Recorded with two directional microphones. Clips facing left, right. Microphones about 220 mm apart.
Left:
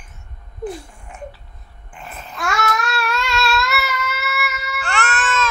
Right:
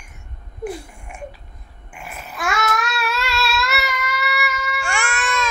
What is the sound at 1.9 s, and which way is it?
Babbling, 10° right (ahead or behind).